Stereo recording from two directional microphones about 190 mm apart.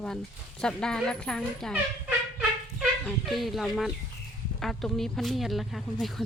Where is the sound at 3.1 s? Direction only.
Centre (ahead or behind).